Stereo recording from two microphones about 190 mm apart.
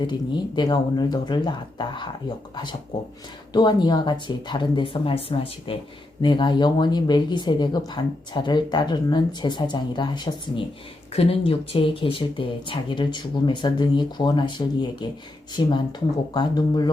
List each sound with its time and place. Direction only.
0.0 s speech: 25° left (ahead or behind)
3.5 s speech: 20° left (ahead or behind)
16.3 s speech: 20° left (ahead or behind)